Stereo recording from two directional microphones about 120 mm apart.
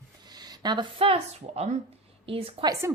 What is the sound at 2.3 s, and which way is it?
Speech, 50° right (ahead or behind).